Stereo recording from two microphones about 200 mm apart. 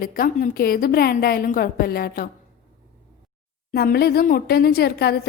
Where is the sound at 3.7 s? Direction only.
50° left (ahead or behind).